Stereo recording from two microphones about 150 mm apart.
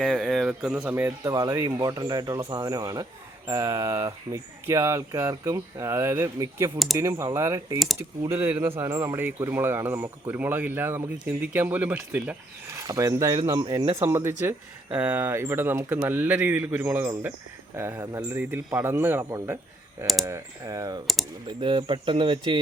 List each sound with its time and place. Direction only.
0.0 s speech: 5° left (ahead or behind)
1.2 s speech: 25° right (ahead or behind)
2.4 s a man's voice: 35° right (ahead or behind); by 12.8 s 10° right (ahead or behind)
12.9 s a man's voice: 20° right (ahead or behind)
21.6 s speech: 35° right (ahead or behind)